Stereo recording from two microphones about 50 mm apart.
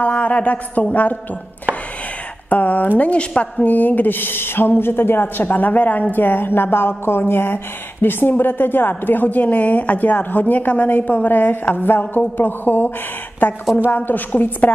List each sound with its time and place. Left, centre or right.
0.0 s a woman's voice: left
2.5 s a woman's voice: left
3.6 s a woman's voice: left